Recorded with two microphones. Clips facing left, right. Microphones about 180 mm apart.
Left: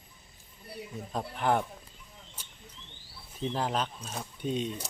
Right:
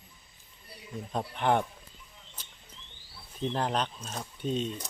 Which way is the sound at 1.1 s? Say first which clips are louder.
Right 1 dB; centre (ahead or behind).